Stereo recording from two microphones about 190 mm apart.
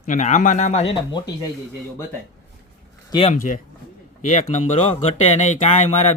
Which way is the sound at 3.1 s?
30° left (ahead or behind).